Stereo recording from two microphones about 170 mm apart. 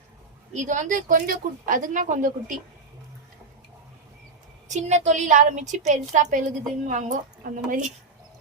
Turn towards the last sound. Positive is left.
turn(degrees=-50)  # may be behind; listen again after turning